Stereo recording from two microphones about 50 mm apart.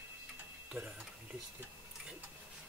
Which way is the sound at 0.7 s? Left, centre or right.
Right.